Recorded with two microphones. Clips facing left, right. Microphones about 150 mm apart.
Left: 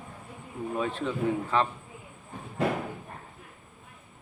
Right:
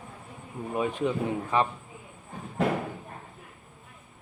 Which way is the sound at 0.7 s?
15° right (ahead or behind).